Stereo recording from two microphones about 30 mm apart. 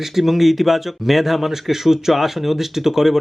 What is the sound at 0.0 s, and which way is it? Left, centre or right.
Speech, centre.